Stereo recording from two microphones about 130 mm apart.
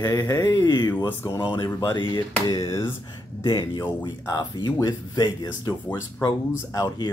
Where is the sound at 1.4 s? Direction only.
35° left (ahead or behind).